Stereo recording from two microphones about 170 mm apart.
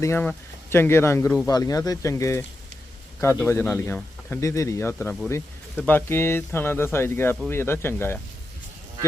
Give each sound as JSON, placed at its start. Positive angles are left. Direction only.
{"t": 0.0, "sound": "speech", "side_deg": 10}